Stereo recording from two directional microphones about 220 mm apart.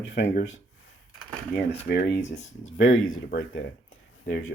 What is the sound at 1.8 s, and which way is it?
Speech, 45° left (ahead or behind).